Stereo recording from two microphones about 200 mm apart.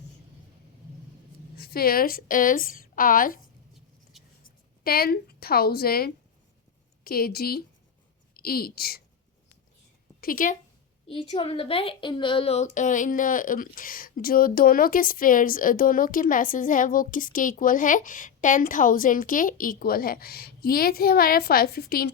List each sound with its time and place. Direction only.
1.5 s a woman's voice: 50° left (ahead or behind)
4.4 s a woman's voice: 50° left (ahead or behind)
10.2 s speech: 45° left (ahead or behind)
11.1 s a woman's voice: 25° left (ahead or behind); by 22.1 s 50° left (ahead or behind)